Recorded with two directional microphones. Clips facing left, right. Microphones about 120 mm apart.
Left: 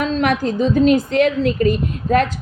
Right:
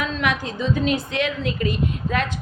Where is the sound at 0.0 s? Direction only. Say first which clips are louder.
Left 6 dB; 45° left (ahead or behind).